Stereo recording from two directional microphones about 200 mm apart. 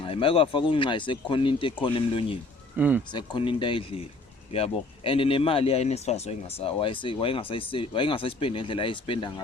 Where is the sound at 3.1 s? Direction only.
25° left (ahead or behind).